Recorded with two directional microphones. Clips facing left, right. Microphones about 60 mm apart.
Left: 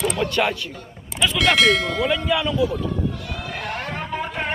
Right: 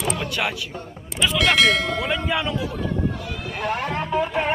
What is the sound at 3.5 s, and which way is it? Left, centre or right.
Music, centre.